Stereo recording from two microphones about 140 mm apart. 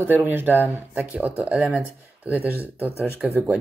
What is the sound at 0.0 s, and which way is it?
Speech, 15° right (ahead or behind).